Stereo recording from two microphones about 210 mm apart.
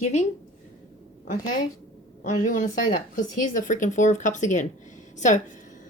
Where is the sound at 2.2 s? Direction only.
35° left (ahead or behind).